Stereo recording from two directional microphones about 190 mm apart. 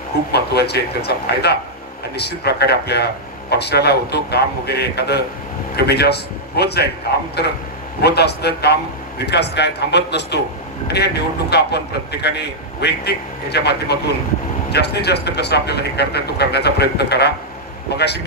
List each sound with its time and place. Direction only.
0.3 s speech: 60° left (ahead or behind)